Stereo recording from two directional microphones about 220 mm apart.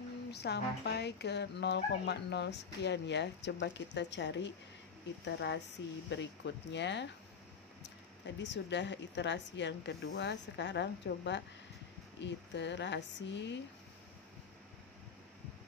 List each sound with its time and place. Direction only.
0.3 s speech: 50° left (ahead or behind)
8.4 s speech: 55° left (ahead or behind)